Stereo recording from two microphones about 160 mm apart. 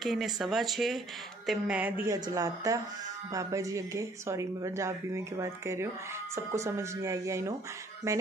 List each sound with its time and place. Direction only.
0.0 s speech: centre (ahead or behind)
2.1 s speech: 25° right (ahead or behind)